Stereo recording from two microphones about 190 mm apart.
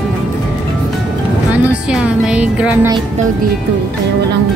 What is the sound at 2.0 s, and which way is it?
Speech, 5° right (ahead or behind).